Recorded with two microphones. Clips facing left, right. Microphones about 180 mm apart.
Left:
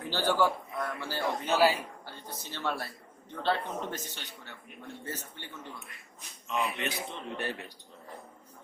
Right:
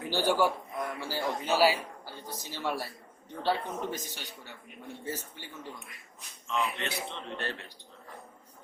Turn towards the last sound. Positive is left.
turn(degrees=10)  # may be behind; listen again after turning